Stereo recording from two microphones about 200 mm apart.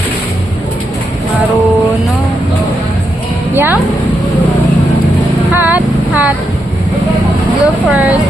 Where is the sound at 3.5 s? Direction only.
10° right (ahead or behind).